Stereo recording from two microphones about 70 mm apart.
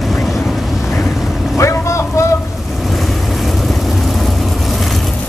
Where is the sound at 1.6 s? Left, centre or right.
Left.